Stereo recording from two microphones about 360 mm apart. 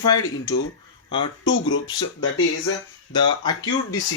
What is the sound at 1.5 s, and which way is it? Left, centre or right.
Speech, left.